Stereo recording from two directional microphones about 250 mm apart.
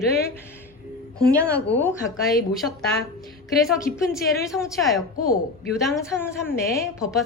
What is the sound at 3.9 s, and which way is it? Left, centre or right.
Speech, left.